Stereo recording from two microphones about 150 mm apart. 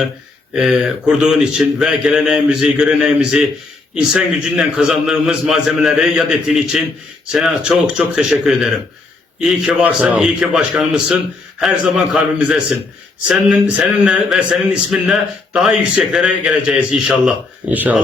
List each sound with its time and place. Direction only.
0.5 s speech: 5° right (ahead or behind)